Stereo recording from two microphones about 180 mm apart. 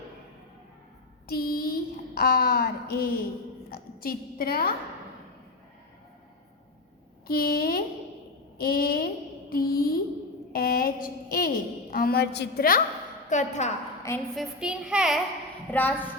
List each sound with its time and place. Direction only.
1.3 s a sound: 55° left (ahead or behind)
7.3 s a woman's voice: 55° left (ahead or behind)
13.3 s a woman's voice: 40° left (ahead or behind)
14.3 s a child's voice: 5° right (ahead or behind)
15.7 s a woman's voice: 10° left (ahead or behind)